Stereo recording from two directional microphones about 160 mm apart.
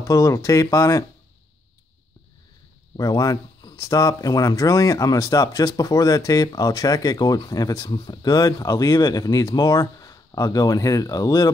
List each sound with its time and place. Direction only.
0.0 s speech: 20° left (ahead or behind)
3.0 s speech: 25° left (ahead or behind)